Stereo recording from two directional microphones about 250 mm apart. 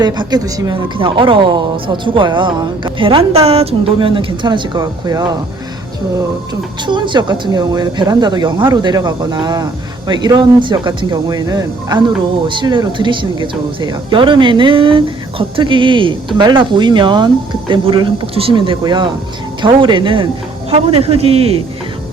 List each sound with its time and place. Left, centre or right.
0.0 s speech: centre